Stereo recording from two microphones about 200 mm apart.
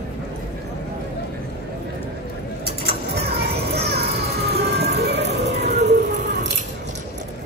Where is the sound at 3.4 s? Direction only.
55° right (ahead or behind).